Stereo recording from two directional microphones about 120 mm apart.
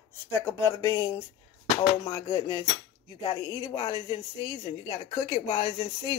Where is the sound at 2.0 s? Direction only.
35° left (ahead or behind).